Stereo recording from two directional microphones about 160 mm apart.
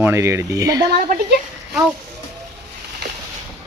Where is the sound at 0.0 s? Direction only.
15° right (ahead or behind).